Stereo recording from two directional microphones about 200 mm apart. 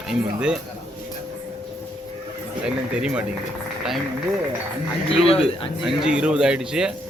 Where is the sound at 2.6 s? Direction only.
5° right (ahead or behind).